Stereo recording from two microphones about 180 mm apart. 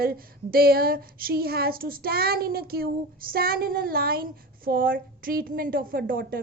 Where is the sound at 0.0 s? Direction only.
55° right (ahead or behind).